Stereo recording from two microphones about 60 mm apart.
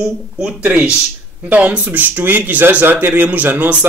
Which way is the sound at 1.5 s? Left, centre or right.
Right.